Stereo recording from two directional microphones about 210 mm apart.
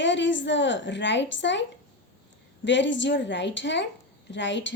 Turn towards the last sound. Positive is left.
turn(degrees=60)  # may be behind; listen again after turning